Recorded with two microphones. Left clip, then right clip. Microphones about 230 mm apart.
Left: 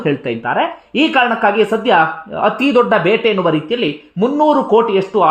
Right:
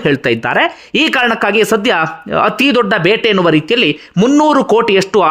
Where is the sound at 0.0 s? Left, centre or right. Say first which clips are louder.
Right 5 dB; right.